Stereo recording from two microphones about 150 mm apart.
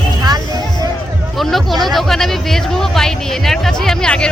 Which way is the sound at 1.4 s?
Centre (ahead or behind).